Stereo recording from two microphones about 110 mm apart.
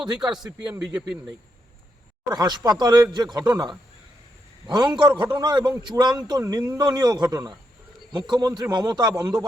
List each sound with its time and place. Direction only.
0.0 s a man's voice: 5° right (ahead or behind)
2.3 s a man's voice: 40° right (ahead or behind)